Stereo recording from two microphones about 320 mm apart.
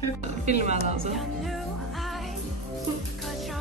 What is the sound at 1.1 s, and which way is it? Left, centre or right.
Music, centre.